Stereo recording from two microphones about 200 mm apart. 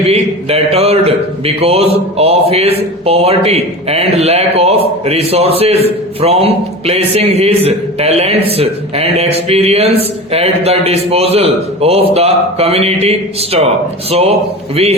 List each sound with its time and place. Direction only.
0.0 s a man's voice: 30° right (ahead or behind)